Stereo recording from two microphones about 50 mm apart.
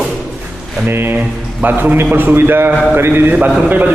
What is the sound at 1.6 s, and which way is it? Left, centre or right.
A man's voice, right.